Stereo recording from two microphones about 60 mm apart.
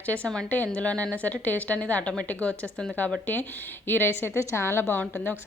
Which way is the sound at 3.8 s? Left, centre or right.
Left.